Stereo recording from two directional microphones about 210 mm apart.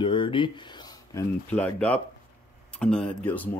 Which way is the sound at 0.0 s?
25° left (ahead or behind).